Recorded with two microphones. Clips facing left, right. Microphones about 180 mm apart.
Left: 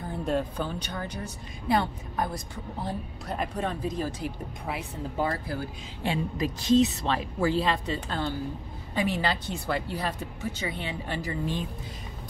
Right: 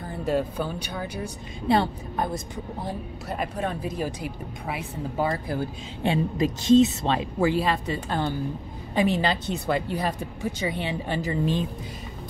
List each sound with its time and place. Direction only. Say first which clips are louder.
0.1 s speech: right 3 dB; 5° right (ahead or behind)
1.7 s speech: right 4 dB; 25° right (ahead or behind)
2.8 s speech: left 2 dB; 10° right (ahead or behind)
6.0 s speech: right 5 dB; 25° right (ahead or behind)